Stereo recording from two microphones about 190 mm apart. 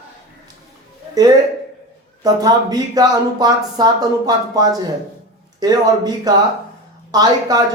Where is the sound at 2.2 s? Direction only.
20° right (ahead or behind).